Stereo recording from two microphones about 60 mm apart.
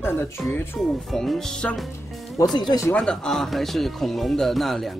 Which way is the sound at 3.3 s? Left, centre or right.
Centre.